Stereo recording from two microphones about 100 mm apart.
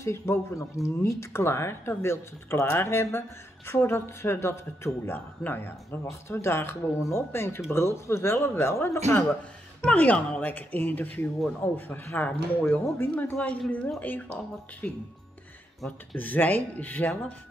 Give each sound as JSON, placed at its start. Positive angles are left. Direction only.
{"t": 0.0, "sound": "speech", "side_deg": 25}
{"t": 9.8, "sound": "speech", "side_deg": 15}
{"t": 15.8, "sound": "speech", "side_deg": 5}
{"t": 16.2, "sound": "speech", "side_deg": 15}